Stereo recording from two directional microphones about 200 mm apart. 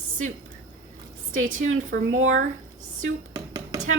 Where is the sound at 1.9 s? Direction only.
70° right (ahead or behind).